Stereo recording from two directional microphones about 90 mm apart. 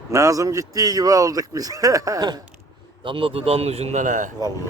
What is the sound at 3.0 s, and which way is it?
Speech, 70° right (ahead or behind).